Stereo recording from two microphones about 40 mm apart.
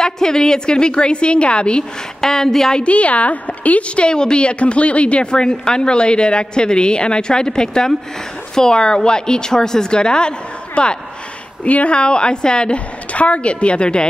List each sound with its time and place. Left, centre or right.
0.0 s a woman's voice: centre
2.2 s a woman's voice: centre
2.8 s a woman's voice: left
4.0 s a woman's voice: left
11.6 s a woman's voice: left